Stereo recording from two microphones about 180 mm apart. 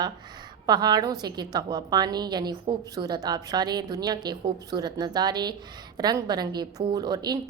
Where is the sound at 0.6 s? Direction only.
25° right (ahead or behind).